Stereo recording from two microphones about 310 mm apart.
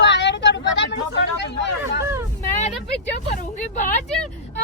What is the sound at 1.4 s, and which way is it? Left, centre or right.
Speech, left.